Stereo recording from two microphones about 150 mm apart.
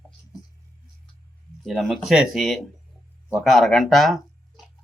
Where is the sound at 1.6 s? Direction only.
Centre (ahead or behind).